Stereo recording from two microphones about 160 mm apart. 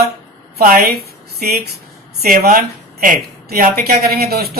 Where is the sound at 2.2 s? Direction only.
65° right (ahead or behind).